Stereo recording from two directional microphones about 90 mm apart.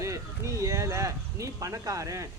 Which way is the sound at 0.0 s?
35° right (ahead or behind).